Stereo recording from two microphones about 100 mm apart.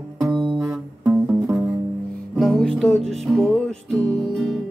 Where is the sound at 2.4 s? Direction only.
5° left (ahead or behind).